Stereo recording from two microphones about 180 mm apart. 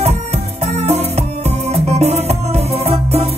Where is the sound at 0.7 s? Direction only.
35° right (ahead or behind).